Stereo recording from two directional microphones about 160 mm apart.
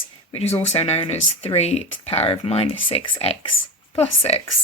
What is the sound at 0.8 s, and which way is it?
Speech, 40° left (ahead or behind).